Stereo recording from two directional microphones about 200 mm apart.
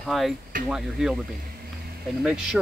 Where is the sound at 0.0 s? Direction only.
Centre (ahead or behind).